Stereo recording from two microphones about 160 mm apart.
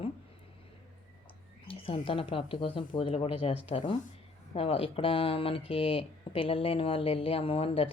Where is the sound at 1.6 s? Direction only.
35° left (ahead or behind).